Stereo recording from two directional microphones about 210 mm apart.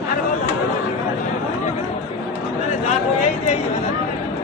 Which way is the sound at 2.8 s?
35° left (ahead or behind).